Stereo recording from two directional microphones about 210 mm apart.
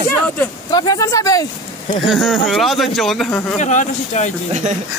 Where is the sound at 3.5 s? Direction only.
35° left (ahead or behind).